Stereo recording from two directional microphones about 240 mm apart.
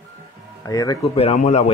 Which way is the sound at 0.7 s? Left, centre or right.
Centre.